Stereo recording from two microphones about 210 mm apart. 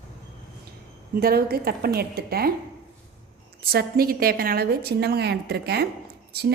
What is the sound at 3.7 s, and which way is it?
A woman's voice, 45° right (ahead or behind).